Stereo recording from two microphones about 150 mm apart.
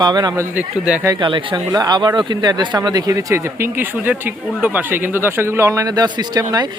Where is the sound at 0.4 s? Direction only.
10° right (ahead or behind).